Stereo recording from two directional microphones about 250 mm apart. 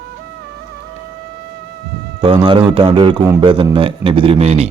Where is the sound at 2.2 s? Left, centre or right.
Right.